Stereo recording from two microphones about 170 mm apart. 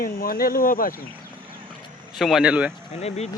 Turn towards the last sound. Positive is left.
turn(degrees=40)  # may be behind; listen again after turning